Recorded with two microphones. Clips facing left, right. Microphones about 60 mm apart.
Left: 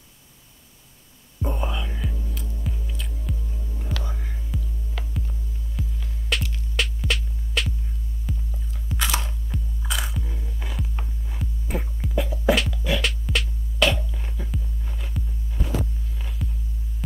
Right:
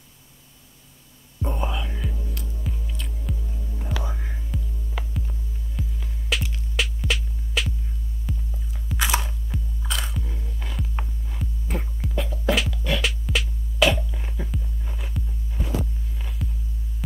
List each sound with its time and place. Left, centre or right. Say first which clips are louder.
1.4 s music: even; centre
3.8 s whispering: right 2 dB; centre
4.5 s music: even; centre
5.0 s hum: right 3 dB; centre
5.8 s music: even; centre
8.3 s hum: even; centre
8.9 s crunch: right 2 dB; centre
11.2 s music: even; centre
16.2 s hum: even; centre